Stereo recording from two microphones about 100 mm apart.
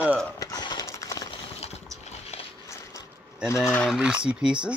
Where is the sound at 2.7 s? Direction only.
30° left (ahead or behind).